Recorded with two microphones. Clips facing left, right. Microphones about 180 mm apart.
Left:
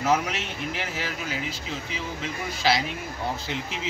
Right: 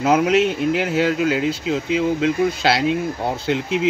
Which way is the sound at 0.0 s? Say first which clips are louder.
Right 7 dB; 70° right (ahead or behind).